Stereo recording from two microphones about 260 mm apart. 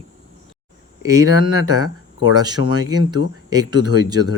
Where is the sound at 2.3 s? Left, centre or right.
Centre.